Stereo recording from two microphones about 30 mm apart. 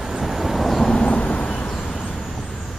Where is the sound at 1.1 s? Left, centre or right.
Left.